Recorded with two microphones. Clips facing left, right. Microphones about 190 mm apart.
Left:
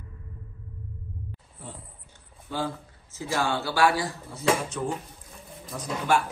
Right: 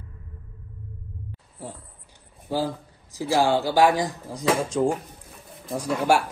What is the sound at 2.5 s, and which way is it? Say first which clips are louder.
Speech: right 5 dB; 35° right (ahead or behind).